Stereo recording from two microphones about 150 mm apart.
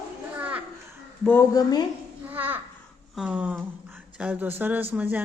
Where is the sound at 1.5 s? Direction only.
25° left (ahead or behind).